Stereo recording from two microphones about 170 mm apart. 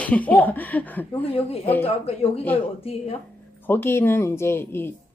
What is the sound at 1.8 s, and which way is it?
Speech, 35° left (ahead or behind).